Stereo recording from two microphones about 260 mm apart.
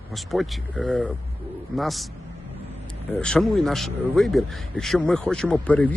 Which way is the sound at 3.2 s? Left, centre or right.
Centre.